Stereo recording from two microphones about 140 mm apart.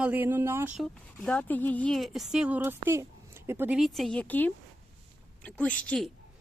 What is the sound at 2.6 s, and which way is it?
Speech, 15° right (ahead or behind).